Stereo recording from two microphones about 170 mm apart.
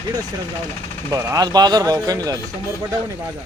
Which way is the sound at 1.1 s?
20° right (ahead or behind).